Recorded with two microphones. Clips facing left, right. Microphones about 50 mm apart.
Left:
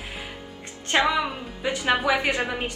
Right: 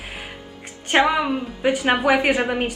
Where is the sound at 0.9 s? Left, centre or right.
Right.